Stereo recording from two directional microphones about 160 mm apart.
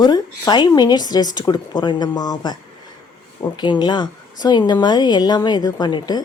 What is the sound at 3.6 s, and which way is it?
Speech, 30° left (ahead or behind).